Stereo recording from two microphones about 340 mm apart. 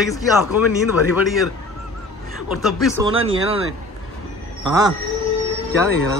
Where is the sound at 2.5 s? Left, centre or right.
Centre.